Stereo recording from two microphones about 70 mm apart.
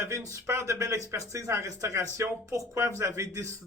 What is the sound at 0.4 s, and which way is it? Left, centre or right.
Speech, right.